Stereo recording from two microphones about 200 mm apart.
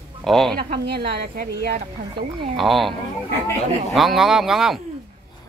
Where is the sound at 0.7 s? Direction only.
55° right (ahead or behind).